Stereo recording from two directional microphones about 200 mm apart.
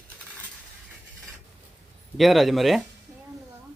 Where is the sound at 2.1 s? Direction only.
Centre (ahead or behind).